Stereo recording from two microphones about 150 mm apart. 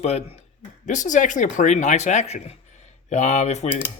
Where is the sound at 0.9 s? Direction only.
55° left (ahead or behind).